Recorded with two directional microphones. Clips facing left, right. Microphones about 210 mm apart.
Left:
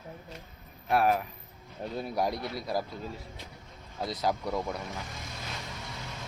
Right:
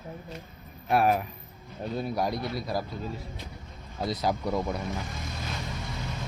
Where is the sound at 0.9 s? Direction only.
15° right (ahead or behind).